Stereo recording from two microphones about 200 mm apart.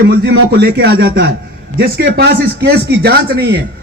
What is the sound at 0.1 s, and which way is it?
Speech, 55° right (ahead or behind).